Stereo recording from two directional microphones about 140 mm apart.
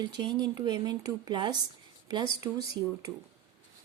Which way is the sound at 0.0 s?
30° right (ahead or behind).